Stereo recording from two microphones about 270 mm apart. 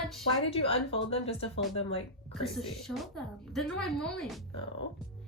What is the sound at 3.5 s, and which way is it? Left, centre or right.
Speech, centre.